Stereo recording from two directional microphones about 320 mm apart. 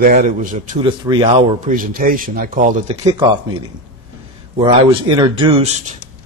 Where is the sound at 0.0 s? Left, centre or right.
Right.